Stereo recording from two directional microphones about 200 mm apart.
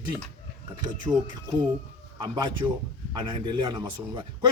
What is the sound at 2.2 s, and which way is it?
Speech, 20° right (ahead or behind).